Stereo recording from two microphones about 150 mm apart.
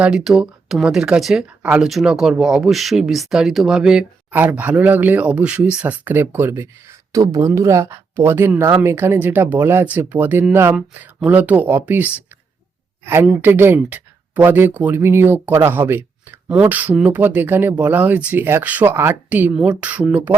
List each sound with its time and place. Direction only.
0.0 s speech: 5° right (ahead or behind)
13.2 s speech: 15° right (ahead or behind)